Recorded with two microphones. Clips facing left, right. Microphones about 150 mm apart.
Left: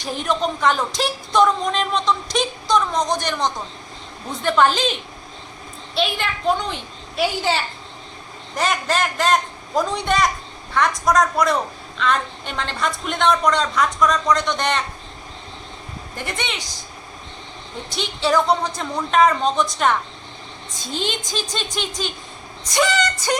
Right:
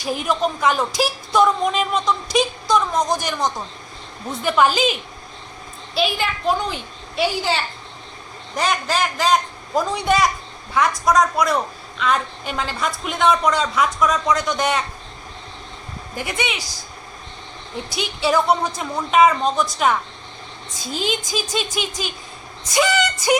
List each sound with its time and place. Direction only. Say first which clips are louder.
0.0 s a woman's voice: right 1 dB; 5° right (ahead or behind)
16.1 s a woman's voice: right 3 dB; 5° right (ahead or behind)
17.8 s a woman's voice: even; 10° right (ahead or behind)